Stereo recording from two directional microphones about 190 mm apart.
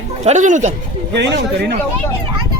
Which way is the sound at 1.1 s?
65° right (ahead or behind).